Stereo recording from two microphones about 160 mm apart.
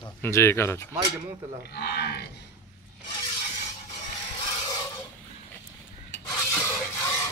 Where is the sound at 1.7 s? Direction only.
85° left.